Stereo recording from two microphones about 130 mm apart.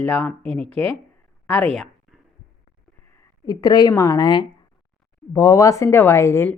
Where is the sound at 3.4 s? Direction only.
30° left (ahead or behind).